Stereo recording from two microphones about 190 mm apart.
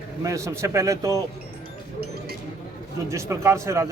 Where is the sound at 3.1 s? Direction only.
15° right (ahead or behind).